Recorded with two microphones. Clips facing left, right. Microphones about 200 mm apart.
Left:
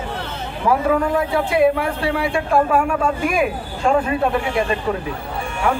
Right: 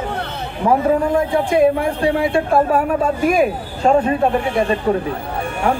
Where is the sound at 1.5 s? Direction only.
40° right (ahead or behind).